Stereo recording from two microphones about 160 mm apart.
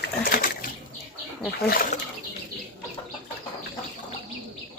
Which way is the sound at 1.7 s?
65° left (ahead or behind).